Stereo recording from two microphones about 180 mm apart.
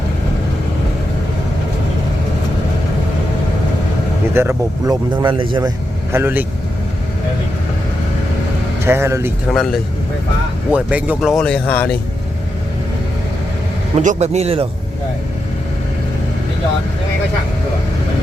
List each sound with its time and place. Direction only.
4.4 s speech: 15° right (ahead or behind)
6.1 s speech: 15° right (ahead or behind)
8.8 s speech: 15° right (ahead or behind)
9.5 s speech: centre (ahead or behind)
13.9 s speech: 40° right (ahead or behind)